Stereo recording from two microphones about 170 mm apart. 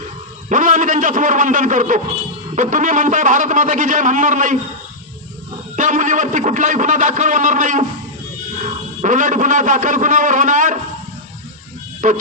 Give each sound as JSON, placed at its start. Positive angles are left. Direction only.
{"t": 0.5, "sound": "a man's voice", "side_deg": -50}
{"t": 5.7, "sound": "a man's voice", "side_deg": -50}
{"t": 12.0, "sound": "a man's voice", "side_deg": -50}